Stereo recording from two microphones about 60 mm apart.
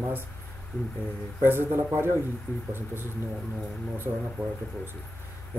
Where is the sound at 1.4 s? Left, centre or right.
Right.